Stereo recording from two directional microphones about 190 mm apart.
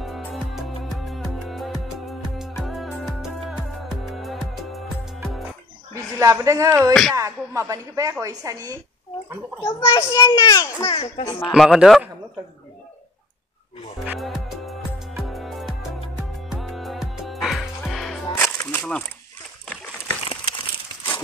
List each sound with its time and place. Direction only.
0.0 s music: centre (ahead or behind)
6.1 s a woman's voice: 15° right (ahead or behind)
6.9 s a man's voice: centre (ahead or behind)
7.2 s a woman's voice: 15° right (ahead or behind)
9.9 s a child's voice: 15° left (ahead or behind)
10.9 s a child's voice: 30° left (ahead or behind)
11.2 s speech: 20° left (ahead or behind)
11.5 s a man's voice: centre (ahead or behind)
14.0 s music: centre (ahead or behind)
18.8 s speech: 5° left (ahead or behind)
20.2 s crumpling: 25° left (ahead or behind)